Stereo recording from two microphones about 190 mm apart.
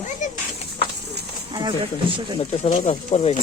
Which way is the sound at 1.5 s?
20° right (ahead or behind).